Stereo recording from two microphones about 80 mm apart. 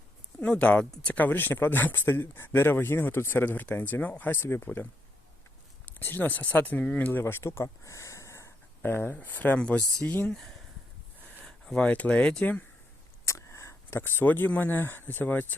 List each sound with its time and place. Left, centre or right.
0.3 s speech: centre
11.4 s speech: centre
13.2 s speech: left